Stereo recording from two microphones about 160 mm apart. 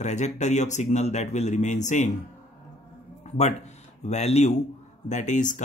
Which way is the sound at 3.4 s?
45° left (ahead or behind).